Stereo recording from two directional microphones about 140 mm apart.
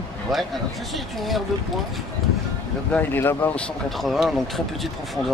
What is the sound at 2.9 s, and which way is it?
Speech, 15° left (ahead or behind).